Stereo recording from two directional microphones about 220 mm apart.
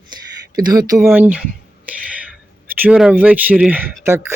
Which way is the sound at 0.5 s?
15° right (ahead or behind).